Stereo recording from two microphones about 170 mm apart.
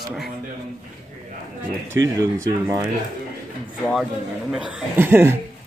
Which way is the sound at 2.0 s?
15° right (ahead or behind).